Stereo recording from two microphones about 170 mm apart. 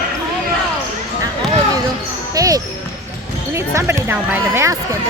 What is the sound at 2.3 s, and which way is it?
Basketball bounce, 20° right (ahead or behind).